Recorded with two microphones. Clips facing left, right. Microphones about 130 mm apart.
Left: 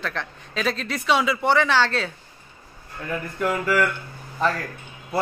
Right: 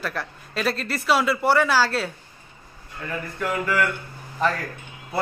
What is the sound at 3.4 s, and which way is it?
Speech, 5° left (ahead or behind).